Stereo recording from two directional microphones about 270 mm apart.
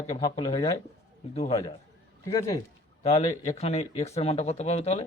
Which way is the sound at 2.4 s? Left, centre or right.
Centre.